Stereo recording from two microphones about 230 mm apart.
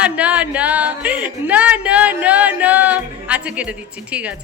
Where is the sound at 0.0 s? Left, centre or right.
Centre.